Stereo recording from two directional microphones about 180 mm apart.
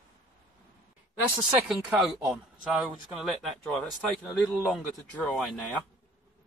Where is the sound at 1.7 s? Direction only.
Centre (ahead or behind).